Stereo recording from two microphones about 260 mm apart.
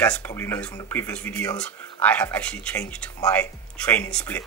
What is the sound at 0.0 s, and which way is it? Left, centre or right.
Speech, centre.